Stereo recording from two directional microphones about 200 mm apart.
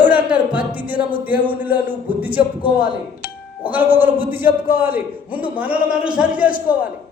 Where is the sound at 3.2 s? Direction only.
50° left (ahead or behind).